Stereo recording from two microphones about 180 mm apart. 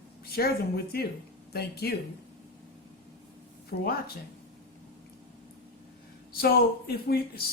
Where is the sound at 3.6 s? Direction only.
55° left (ahead or behind).